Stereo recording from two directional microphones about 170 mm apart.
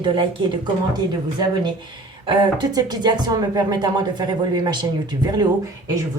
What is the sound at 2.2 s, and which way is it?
Speech, 30° right (ahead or behind).